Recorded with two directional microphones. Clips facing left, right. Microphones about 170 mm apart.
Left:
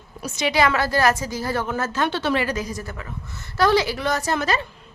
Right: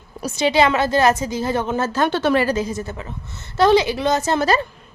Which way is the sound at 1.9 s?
45° right (ahead or behind).